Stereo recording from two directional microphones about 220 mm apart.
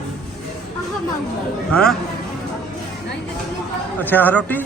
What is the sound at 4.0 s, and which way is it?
Speech, 10° left (ahead or behind).